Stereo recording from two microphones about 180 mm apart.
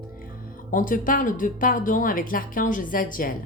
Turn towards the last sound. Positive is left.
turn(degrees=50)  # may be behind; listen again after turning